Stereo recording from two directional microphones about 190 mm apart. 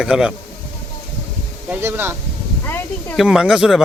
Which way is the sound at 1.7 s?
10° right (ahead or behind).